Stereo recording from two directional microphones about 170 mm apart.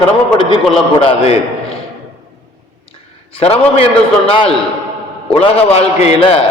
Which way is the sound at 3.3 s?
35° left (ahead or behind).